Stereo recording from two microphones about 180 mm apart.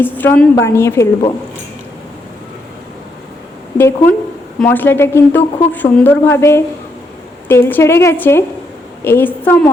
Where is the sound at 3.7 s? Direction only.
10° left (ahead or behind).